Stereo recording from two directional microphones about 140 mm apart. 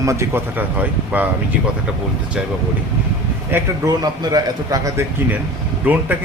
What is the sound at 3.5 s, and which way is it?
Speech, 15° right (ahead or behind).